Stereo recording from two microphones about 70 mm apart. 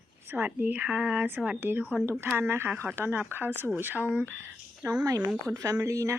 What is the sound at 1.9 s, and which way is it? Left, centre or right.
Speech, right.